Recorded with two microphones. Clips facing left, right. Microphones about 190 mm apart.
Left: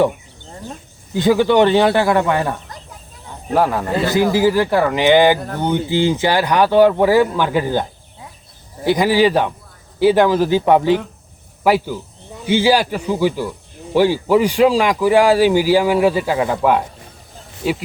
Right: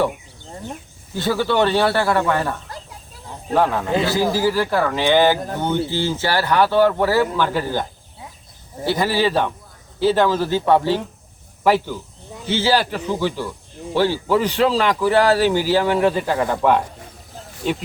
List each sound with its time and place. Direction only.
1.1 s speech: 15° left (ahead or behind)
4.1 s speech: 15° left (ahead or behind)
17.4 s a sound: 5° left (ahead or behind)